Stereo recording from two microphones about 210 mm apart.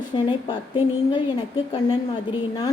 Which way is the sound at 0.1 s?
20° left (ahead or behind).